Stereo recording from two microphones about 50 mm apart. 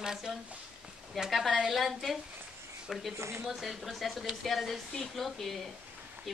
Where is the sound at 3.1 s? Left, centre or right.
Right.